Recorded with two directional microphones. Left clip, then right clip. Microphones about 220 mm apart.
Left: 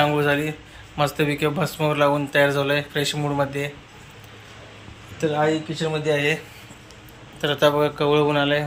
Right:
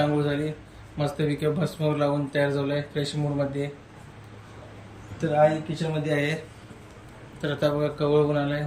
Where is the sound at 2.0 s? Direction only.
50° left (ahead or behind).